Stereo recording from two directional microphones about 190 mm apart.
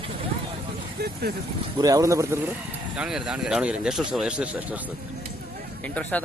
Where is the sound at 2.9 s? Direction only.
5° right (ahead or behind).